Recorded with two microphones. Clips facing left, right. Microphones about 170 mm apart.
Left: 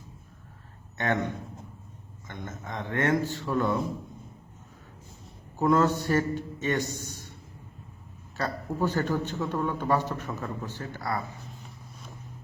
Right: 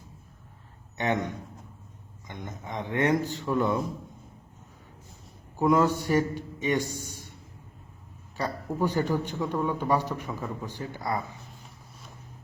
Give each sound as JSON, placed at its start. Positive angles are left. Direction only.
{"t": 0.9, "sound": "a man's voice", "side_deg": -15}
{"t": 2.2, "sound": "a man's voice", "side_deg": -15}
{"t": 5.5, "sound": "a man's voice", "side_deg": -10}
{"t": 8.4, "sound": "a man's voice", "side_deg": -15}